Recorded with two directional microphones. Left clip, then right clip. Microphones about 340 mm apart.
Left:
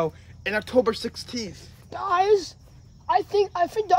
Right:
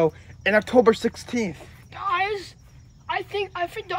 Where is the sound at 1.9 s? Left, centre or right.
Centre.